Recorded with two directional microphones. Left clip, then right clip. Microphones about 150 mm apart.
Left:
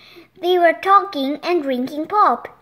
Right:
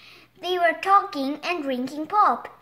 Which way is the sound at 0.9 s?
40° left (ahead or behind).